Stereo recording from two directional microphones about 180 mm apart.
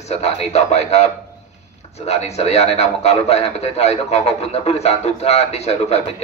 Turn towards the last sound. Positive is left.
turn(degrees=35)  # may be behind; listen again after turning